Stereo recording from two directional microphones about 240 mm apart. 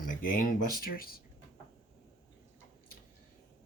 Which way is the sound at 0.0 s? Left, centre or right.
Left.